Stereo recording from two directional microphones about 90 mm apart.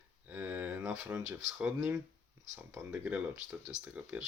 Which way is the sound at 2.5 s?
25° right (ahead or behind).